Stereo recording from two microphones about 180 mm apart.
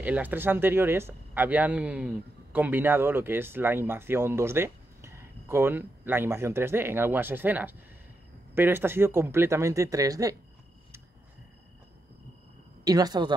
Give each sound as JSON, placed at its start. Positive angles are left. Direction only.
{"t": 0.0, "sound": "speech", "side_deg": -10}
{"t": 12.8, "sound": "speech", "side_deg": -20}